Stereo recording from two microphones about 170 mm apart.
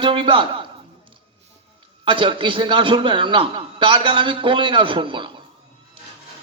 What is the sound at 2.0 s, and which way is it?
A man's voice, 30° right (ahead or behind).